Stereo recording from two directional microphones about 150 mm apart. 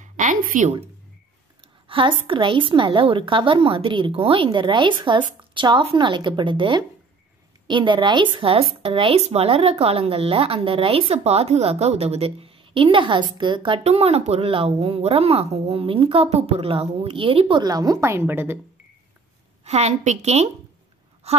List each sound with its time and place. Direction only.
0.0 s a sound: 60° right (ahead or behind)
1.9 s speech: 35° right (ahead or behind); by 18.6 s 15° right (ahead or behind)
19.6 s a woman's voice: 50° right (ahead or behind)